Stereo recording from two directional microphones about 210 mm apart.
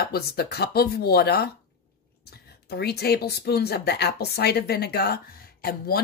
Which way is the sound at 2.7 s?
50° left (ahead or behind).